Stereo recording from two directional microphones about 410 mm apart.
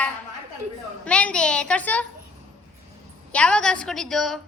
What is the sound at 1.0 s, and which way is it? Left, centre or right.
A child's voice, centre.